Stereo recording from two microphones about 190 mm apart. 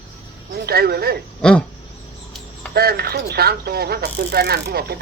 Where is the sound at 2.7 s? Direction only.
55° right (ahead or behind).